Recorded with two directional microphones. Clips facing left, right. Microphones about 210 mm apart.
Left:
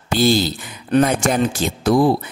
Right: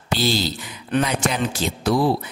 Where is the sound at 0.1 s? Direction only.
50° left (ahead or behind).